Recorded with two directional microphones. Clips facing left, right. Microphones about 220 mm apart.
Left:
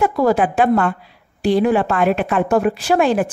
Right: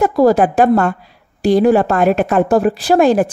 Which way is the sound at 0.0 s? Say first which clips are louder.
Right 4 dB; 40° right (ahead or behind).